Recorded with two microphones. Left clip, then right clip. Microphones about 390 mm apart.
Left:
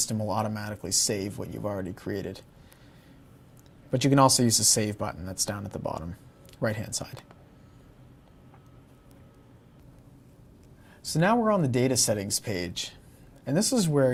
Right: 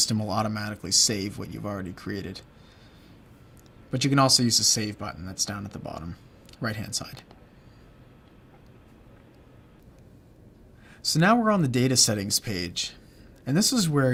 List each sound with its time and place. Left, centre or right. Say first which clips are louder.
0.0 s speech: right 3 dB; left
3.9 s speech: even; left
11.0 s speech: right 3 dB; left